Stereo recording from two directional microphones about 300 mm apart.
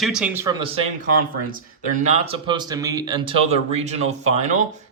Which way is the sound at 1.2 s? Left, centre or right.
Right.